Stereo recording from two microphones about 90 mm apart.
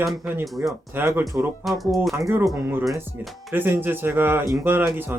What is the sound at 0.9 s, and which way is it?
Speech, 25° right (ahead or behind).